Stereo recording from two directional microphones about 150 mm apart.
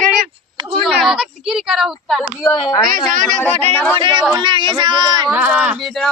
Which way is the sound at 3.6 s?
10° left (ahead or behind).